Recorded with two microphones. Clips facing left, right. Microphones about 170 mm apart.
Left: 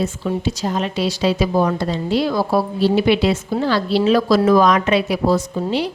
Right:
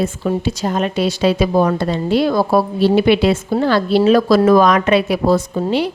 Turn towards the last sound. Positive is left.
turn(degrees=-55)  # may be behind; listen again after turning